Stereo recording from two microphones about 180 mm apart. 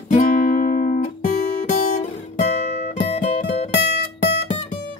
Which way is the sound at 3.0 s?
40° left (ahead or behind).